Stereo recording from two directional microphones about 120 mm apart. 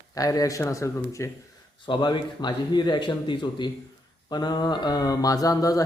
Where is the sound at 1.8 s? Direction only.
40° left (ahead or behind).